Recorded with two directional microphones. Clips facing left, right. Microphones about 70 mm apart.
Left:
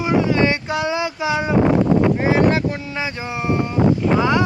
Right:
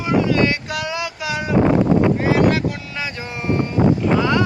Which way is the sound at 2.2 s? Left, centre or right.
Left.